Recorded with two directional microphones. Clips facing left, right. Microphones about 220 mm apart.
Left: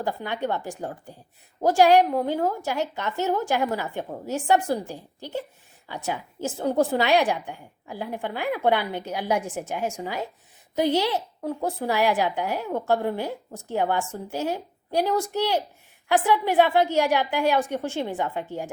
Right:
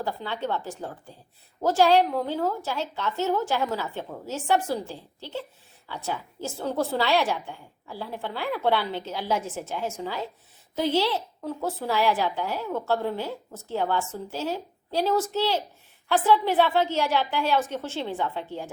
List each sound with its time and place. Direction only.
0.0 s a woman's voice: 15° left (ahead or behind)